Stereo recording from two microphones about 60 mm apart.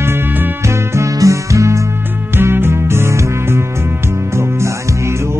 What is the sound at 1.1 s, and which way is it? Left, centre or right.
Music, right.